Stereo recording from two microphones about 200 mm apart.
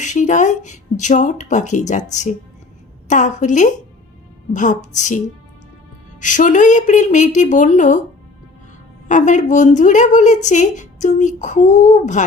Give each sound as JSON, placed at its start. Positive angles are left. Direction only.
{"t": 0.0, "sound": "a woman's voice", "side_deg": 40}
{"t": 3.1, "sound": "a woman's voice", "side_deg": 40}
{"t": 9.0, "sound": "a woman's voice", "side_deg": 40}